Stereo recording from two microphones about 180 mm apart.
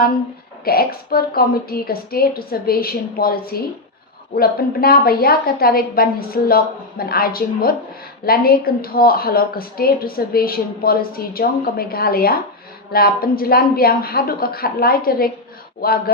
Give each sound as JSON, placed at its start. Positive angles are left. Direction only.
{"t": 0.6, "sound": "speech", "side_deg": 55}